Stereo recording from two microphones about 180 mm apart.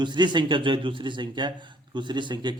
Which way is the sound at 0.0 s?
25° right (ahead or behind).